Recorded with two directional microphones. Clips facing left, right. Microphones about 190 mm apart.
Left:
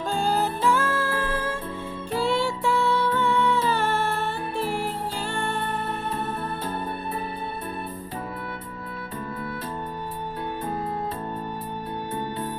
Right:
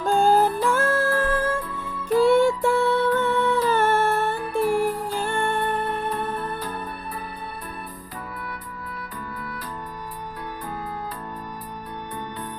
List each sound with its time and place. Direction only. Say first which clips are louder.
0.0 s music: right 6 dB; 50° right (ahead or behind)
1.6 s music: right 1 dB; 25° left (ahead or behind)
2.4 s music: right 5 dB; 50° right (ahead or behind)
3.7 s humming: right 4 dB; 50° right (ahead or behind)
4.7 s music: right 6 dB; 50° right (ahead or behind)
6.1 s music: right 2 dB; 25° left (ahead or behind)